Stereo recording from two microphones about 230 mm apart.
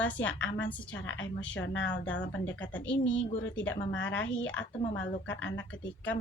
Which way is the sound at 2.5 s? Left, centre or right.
Centre.